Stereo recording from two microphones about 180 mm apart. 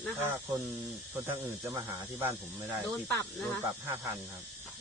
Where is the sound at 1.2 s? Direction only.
15° right (ahead or behind).